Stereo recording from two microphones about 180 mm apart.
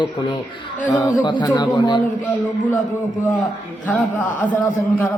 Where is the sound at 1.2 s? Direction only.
25° left (ahead or behind).